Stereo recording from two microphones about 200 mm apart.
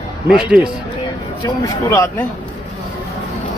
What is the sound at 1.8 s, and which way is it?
Speech, 15° left (ahead or behind).